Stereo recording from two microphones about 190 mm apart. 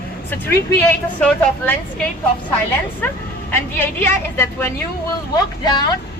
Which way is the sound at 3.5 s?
10° left (ahead or behind).